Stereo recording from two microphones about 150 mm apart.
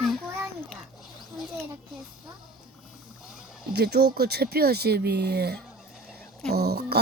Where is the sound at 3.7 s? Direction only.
90° right.